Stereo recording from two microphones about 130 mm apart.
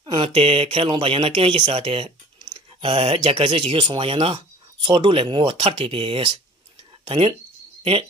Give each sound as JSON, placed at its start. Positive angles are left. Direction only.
{"t": 0.0, "sound": "speech", "side_deg": -40}